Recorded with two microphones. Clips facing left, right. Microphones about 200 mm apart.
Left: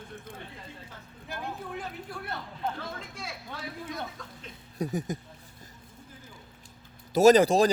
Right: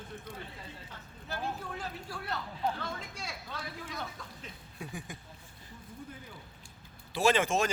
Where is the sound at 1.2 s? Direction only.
20° left (ahead or behind).